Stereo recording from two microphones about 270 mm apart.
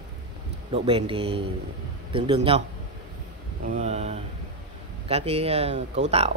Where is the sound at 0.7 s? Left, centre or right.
Centre.